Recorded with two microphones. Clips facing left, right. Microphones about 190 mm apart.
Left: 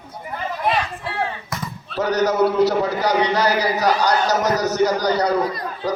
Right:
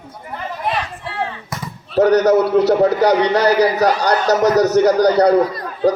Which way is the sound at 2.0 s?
65° right (ahead or behind).